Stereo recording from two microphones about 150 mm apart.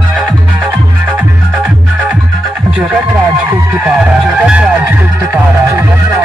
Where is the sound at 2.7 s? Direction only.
10° right (ahead or behind).